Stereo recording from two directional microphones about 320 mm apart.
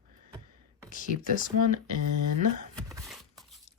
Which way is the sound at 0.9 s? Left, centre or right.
Left.